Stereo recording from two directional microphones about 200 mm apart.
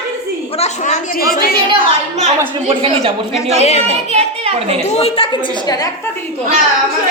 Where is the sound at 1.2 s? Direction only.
45° left (ahead or behind).